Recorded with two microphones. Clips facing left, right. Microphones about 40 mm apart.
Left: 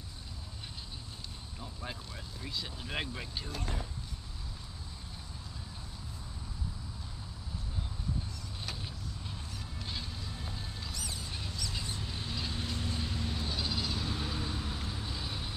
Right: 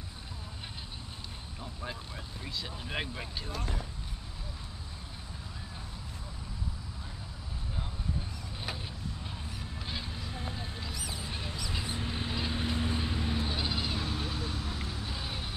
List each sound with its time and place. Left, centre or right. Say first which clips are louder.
1.6 s vehicle: right 2 dB; centre
2.5 s speech: right 1 dB; centre
8.6 s vehicle: right 4 dB; centre
10.1 s a sound: right 4 dB; right
14.0 s vehicle: right 1 dB; centre
15.0 s vehicle: right 1 dB; right